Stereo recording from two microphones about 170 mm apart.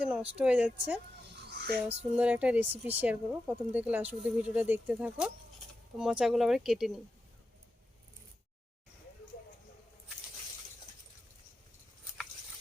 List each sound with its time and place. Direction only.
0.3 s speech: 5° right (ahead or behind)
1.4 s a sound: 75° right (ahead or behind)
2.1 s speech: 10° right (ahead or behind)